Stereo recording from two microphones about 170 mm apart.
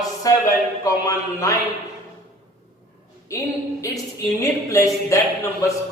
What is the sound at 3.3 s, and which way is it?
A woman's voice, 20° left (ahead or behind).